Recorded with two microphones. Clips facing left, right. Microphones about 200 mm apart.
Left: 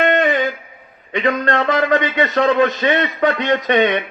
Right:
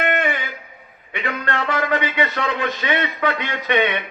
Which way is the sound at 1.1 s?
40° left (ahead or behind).